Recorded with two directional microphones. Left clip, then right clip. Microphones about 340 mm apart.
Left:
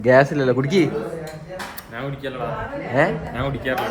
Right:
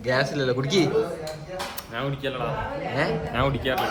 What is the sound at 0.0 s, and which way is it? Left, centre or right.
A man's voice, centre.